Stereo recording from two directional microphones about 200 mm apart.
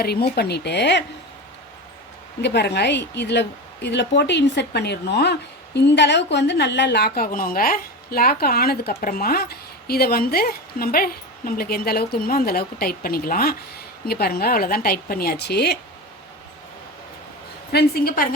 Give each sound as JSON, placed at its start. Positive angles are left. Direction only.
{"t": 0.0, "sound": "a woman's voice", "side_deg": 50}
{"t": 2.4, "sound": "a woman's voice", "side_deg": 55}
{"t": 17.7, "sound": "a woman's voice", "side_deg": 50}